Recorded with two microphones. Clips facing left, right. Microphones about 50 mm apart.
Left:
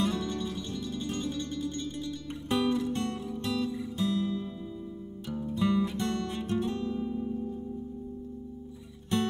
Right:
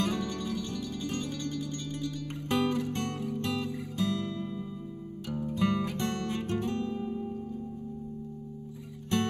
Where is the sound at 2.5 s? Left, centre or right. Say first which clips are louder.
Left 1 dB; right.